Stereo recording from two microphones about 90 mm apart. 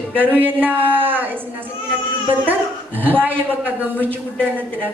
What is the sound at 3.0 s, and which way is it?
A man's voice, 20° right (ahead or behind).